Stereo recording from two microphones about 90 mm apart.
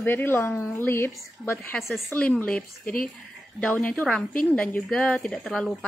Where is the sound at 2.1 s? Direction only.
10° left (ahead or behind).